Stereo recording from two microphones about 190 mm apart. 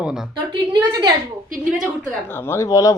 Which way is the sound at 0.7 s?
20° right (ahead or behind).